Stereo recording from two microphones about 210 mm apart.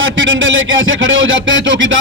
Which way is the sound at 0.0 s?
65° right (ahead or behind).